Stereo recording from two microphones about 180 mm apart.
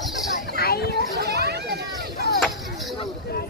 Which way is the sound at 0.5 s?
60° left (ahead or behind).